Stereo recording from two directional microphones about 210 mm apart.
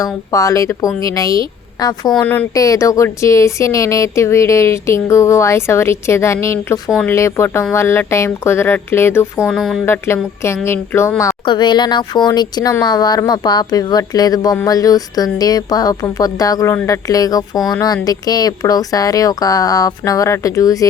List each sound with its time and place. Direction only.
0.0 s a woman's voice: 15° left (ahead or behind)
6.8 s speech: centre (ahead or behind)
7.1 s a woman's voice: 15° left (ahead or behind)
9.4 s speech: centre (ahead or behind)
9.8 s a woman's voice: 10° left (ahead or behind)